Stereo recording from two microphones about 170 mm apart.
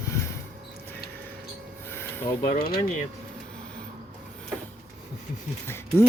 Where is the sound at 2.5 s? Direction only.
65° left (ahead or behind).